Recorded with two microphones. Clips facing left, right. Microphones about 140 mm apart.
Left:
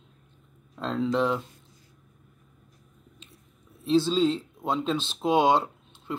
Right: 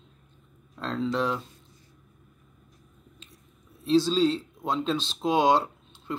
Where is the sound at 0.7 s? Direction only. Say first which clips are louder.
Left 2 dB; 20° left (ahead or behind).